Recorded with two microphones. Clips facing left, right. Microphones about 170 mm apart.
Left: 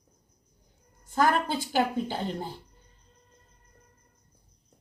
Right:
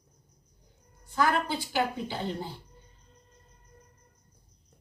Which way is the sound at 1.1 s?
45° left (ahead or behind).